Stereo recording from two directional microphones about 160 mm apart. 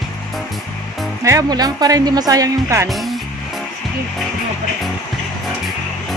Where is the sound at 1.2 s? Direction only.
20° right (ahead or behind).